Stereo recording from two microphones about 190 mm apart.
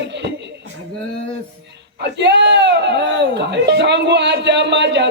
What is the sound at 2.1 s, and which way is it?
Speech, 65° right (ahead or behind).